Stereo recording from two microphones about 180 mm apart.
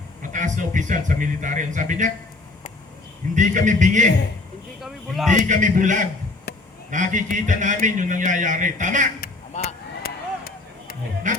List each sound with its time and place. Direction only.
0.2 s a man's voice: 45° right (ahead or behind)
3.3 s a man's voice: 45° right (ahead or behind)
4.8 s speech: centre (ahead or behind)
5.3 s a man's voice: 45° right (ahead or behind)
9.5 s speech: 40° left (ahead or behind)
10.0 s a sound: 55° left (ahead or behind)
11.3 s music: 45° right (ahead or behind)